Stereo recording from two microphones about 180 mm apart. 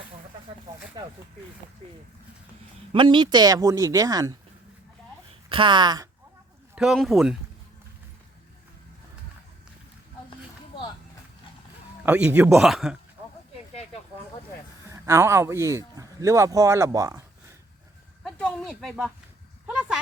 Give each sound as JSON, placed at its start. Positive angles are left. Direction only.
{"t": 2.9, "sound": "speech", "side_deg": -25}
{"t": 5.5, "sound": "speech", "side_deg": -25}
{"t": 6.7, "sound": "speech", "side_deg": 0}
{"t": 12.0, "sound": "speech", "side_deg": -10}
{"t": 14.8, "sound": "speech", "side_deg": -15}
{"t": 18.2, "sound": "a sound", "side_deg": 5}